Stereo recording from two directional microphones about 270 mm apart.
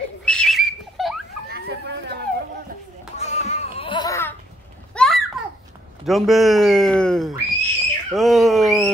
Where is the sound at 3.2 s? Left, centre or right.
Left.